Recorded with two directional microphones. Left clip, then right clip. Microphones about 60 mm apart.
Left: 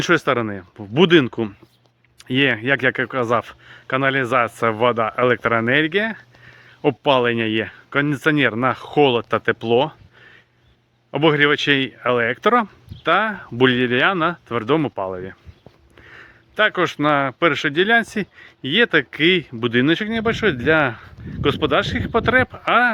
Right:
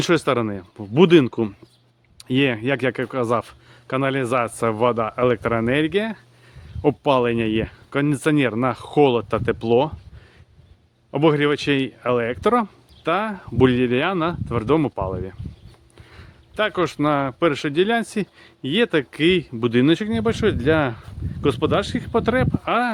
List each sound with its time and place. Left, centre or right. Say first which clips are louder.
0.0 s speech: left 2 dB; right
11.1 s speech: left 2 dB; right
16.0 s a sound: left 7 dB; centre
16.6 s speech: left 3 dB; right
18.3 s speech: left 4 dB; right
22.6 s speech: left 6 dB; right